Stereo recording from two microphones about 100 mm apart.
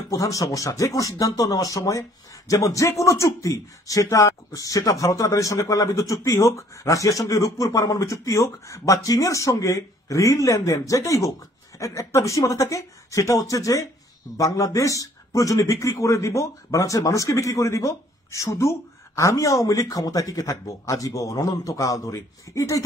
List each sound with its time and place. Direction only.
0.1 s a man's voice: 35° left (ahead or behind)